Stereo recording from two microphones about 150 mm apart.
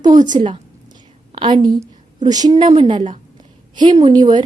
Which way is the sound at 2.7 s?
45° right (ahead or behind).